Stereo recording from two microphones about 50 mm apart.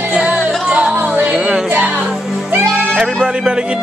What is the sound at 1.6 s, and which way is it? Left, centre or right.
Music, right.